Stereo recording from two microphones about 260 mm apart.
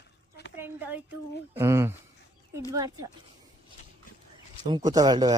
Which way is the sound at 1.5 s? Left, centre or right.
Centre.